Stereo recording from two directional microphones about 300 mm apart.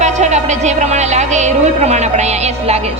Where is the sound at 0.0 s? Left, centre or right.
Right.